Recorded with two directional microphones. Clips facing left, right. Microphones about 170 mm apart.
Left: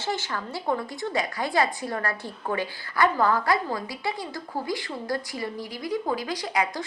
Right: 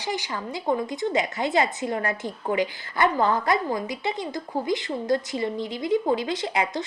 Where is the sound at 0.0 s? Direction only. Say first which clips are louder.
Even; 15° right (ahead or behind).